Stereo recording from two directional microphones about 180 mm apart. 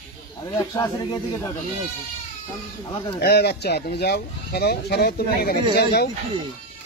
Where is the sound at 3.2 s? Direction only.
65° left (ahead or behind).